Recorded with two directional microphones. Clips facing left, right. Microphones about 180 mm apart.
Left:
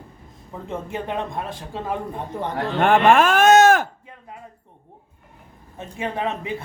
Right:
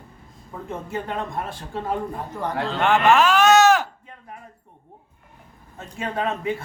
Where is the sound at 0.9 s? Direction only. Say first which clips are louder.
Even; 15° left (ahead or behind).